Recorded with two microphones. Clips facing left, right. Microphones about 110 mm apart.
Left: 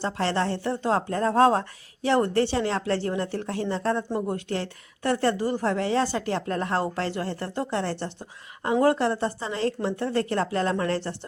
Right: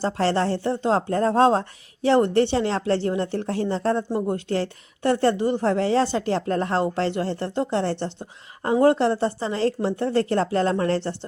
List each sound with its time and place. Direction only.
0.0 s a woman's voice: 35° right (ahead or behind)